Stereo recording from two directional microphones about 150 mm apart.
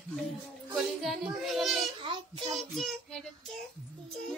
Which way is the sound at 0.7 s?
5° right (ahead or behind).